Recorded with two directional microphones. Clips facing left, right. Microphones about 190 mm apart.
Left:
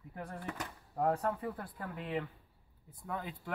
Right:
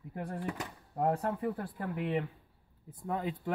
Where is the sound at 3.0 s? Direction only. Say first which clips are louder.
Right 6 dB; 30° right (ahead or behind).